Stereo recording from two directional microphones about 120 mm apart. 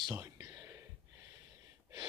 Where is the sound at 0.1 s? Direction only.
25° right (ahead or behind).